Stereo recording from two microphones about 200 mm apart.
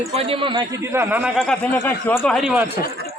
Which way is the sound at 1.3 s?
5° left (ahead or behind).